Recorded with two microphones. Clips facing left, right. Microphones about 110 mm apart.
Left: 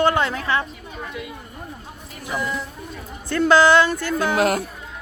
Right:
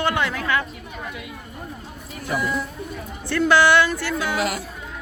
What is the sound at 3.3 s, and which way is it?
Speech, 25° left (ahead or behind).